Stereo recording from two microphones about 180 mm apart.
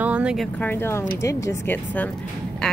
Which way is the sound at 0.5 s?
10° left (ahead or behind).